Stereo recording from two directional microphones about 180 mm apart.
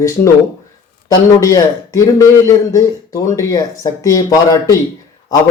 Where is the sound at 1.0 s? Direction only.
20° left (ahead or behind).